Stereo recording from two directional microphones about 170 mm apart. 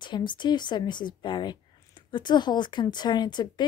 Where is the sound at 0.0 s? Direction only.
25° left (ahead or behind).